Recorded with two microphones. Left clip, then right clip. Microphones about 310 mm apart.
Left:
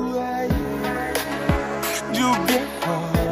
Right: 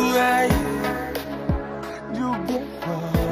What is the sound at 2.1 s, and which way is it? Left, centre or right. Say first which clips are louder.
Music: left 6 dB; left.